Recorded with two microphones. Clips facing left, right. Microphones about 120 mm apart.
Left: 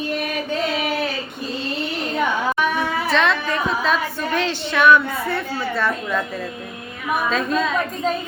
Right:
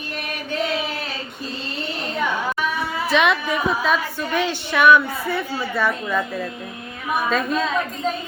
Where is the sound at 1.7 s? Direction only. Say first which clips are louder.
Left 2 dB; centre (ahead or behind).